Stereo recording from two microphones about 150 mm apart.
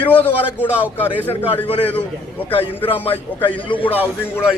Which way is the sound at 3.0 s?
35° left (ahead or behind).